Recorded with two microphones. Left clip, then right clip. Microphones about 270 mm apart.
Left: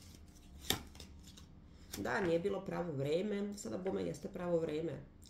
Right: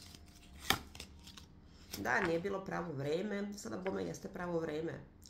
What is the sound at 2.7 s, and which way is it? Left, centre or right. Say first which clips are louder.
Speech: left 1 dB; centre.